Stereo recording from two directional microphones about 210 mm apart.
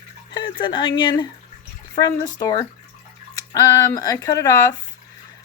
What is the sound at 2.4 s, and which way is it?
Speech, 15° left (ahead or behind).